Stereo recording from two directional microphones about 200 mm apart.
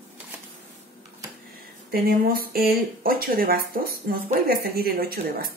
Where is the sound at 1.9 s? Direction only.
50° right (ahead or behind).